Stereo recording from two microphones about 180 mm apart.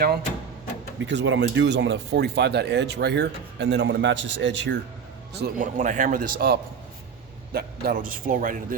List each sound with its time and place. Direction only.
0.9 s speech: 85° right
5.5 s a man's voice: 45° right (ahead or behind)